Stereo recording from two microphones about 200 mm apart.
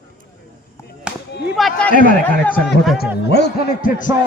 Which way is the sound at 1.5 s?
Centre (ahead or behind).